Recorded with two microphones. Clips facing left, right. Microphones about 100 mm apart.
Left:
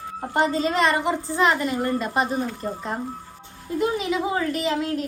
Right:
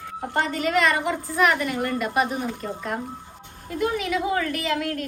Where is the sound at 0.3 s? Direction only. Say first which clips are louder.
Left 2 dB; 20° left (ahead or behind).